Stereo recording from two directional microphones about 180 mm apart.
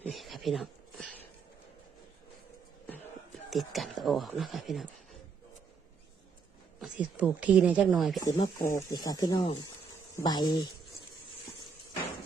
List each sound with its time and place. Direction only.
0.0 s a sound: centre (ahead or behind)
3.5 s speech: centre (ahead or behind)
6.7 s speech: 5° right (ahead or behind)
8.2 s speech: 20° left (ahead or behind)